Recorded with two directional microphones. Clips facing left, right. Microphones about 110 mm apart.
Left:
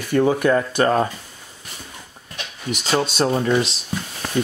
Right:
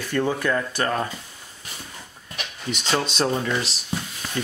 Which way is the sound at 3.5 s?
20° left (ahead or behind).